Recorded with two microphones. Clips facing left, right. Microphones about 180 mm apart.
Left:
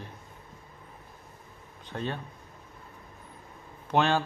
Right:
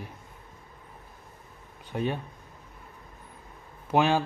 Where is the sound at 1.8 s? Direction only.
10° right (ahead or behind).